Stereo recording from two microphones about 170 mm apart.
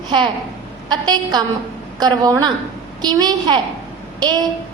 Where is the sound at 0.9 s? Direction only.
25° right (ahead or behind).